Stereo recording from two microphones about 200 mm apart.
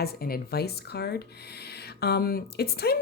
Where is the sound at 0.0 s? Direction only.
50° left (ahead or behind).